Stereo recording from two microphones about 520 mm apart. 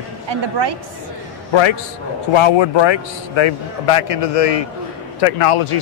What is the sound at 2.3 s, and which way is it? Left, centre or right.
A man's voice, left.